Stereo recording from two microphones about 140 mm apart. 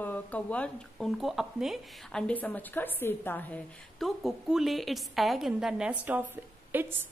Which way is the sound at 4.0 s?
Centre (ahead or behind).